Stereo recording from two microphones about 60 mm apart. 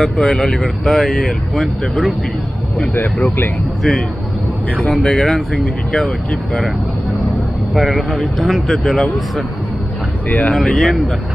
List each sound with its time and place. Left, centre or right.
0.0 s speech: centre
2.9 s speech: left
4.7 s speech: centre
7.7 s speech: centre
10.2 s speech: left
10.5 s speech: centre